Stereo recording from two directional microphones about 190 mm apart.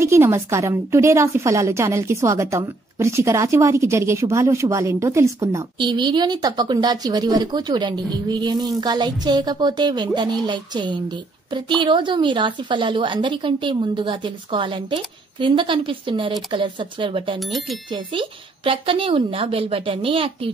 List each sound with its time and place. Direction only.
0.0 s a woman's voice: 15° right (ahead or behind)
17.4 s speech: centre (ahead or behind)
17.9 s a woman's voice: 25° right (ahead or behind)